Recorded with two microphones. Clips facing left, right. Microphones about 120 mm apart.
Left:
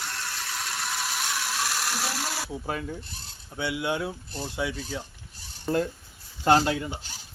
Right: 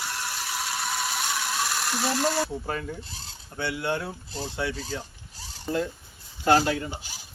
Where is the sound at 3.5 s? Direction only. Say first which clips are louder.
Even; 10° left (ahead or behind).